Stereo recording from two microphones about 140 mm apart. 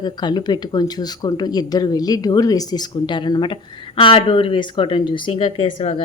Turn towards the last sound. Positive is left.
turn(degrees=40)  # may be behind; listen again after turning